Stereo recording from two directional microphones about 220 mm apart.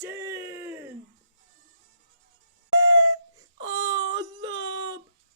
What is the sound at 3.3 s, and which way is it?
Wail, 15° right (ahead or behind).